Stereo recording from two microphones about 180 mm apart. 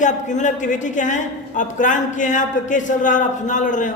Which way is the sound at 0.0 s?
40° left (ahead or behind).